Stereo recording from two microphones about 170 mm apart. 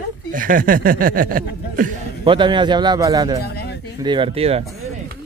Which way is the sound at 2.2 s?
30° right (ahead or behind).